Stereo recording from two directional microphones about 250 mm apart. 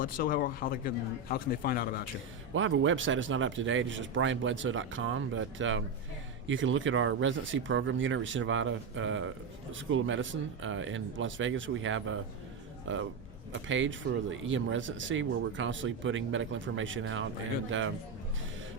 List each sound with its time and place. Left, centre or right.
0.0 s a man's voice: left
2.6 s speech: right